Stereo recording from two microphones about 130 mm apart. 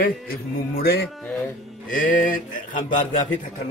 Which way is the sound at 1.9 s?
90° left.